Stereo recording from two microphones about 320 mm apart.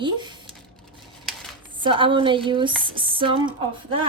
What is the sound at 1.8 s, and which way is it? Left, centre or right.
A woman's voice, centre.